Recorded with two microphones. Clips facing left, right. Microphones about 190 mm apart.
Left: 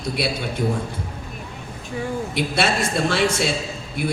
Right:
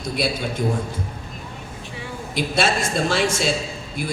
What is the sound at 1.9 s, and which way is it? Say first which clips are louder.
A man's voice: left 4 dB; 60° left (ahead or behind).